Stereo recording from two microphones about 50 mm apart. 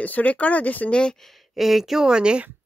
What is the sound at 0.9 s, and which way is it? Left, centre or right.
Speech, centre.